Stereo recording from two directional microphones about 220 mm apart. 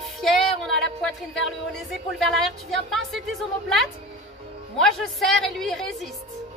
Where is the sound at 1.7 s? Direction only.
Centre (ahead or behind).